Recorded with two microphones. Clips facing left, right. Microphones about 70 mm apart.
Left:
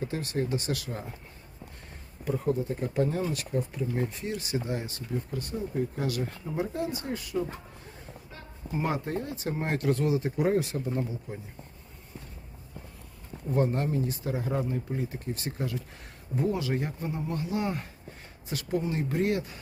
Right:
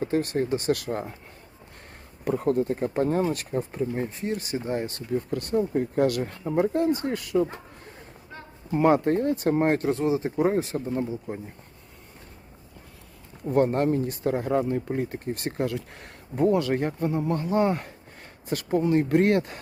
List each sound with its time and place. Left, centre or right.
0.0 s speech: right
2.2 s speech: right
2.7 s speech: right
4.8 s speech: right
8.7 s speech: right
9.7 s speech: right
13.5 s speech: right
17.4 s speech: right